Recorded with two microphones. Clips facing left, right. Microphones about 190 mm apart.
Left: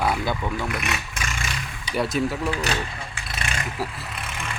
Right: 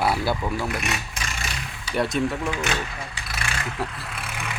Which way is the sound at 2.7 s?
35° left (ahead or behind).